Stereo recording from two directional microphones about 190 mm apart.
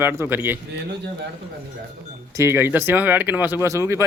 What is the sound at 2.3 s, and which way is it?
Speech, 15° right (ahead or behind).